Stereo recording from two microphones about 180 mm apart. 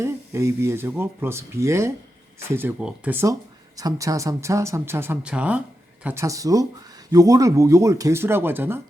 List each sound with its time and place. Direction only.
0.0 s speech: 15° right (ahead or behind)